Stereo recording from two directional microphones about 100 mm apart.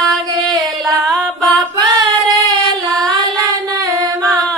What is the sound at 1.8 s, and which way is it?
Singing, 50° right (ahead or behind).